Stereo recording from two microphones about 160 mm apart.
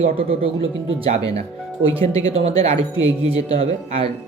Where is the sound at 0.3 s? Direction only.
35° right (ahead or behind).